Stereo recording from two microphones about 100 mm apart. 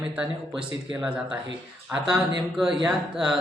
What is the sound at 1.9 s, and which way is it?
Speech, 25° right (ahead or behind).